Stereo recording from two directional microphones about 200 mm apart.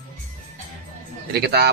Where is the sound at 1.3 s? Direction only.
50° right (ahead or behind).